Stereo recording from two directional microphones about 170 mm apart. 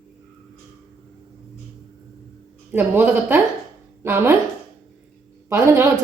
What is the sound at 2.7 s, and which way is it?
A woman's voice, 10° right (ahead or behind).